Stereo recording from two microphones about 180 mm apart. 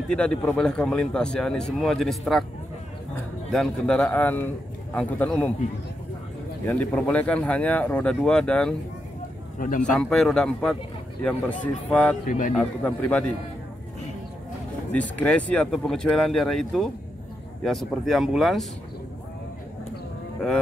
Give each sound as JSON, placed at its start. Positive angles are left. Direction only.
{"t": 0.1, "sound": "speech", "side_deg": 5}
{"t": 3.5, "sound": "speech", "side_deg": 5}
{"t": 6.6, "sound": "speech", "side_deg": 10}
{"t": 9.6, "sound": "speech", "side_deg": 50}
{"t": 9.8, "sound": "speech", "side_deg": 5}
{"t": 12.3, "sound": "speech", "side_deg": 45}
{"t": 12.5, "sound": "speech", "side_deg": 5}
{"t": 14.9, "sound": "speech", "side_deg": 5}